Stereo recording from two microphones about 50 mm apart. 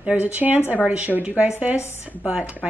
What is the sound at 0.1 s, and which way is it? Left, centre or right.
A woman's voice, right.